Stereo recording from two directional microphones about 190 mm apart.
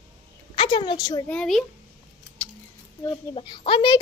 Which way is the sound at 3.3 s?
25° left (ahead or behind).